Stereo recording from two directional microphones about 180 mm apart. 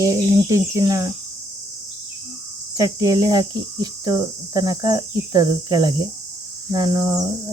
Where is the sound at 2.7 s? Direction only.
20° right (ahead or behind).